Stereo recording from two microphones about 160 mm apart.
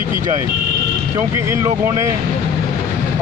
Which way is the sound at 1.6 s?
20° right (ahead or behind).